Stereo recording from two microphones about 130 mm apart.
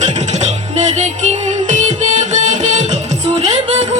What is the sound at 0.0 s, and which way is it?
Music, 65° right (ahead or behind).